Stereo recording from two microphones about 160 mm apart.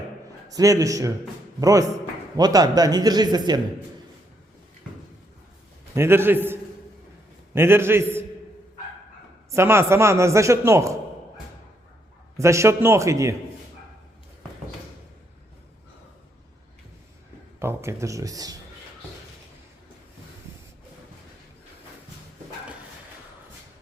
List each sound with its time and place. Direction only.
0.5 s speech: 20° right (ahead or behind)
5.9 s a man's voice: 15° right (ahead or behind)
9.5 s a man's voice: 15° right (ahead or behind)
12.4 s a man's voice: 20° right (ahead or behind)
17.6 s speech: 15° right (ahead or behind)